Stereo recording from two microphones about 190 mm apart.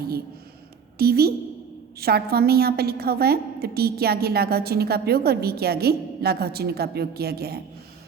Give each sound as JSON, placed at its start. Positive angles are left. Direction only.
{"t": 0.9, "sound": "a woman's voice", "side_deg": -55}